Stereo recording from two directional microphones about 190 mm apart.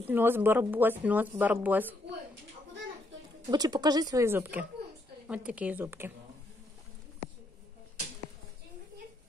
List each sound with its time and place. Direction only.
0.1 s speech: 10° right (ahead or behind)
3.4 s speech: 20° right (ahead or behind)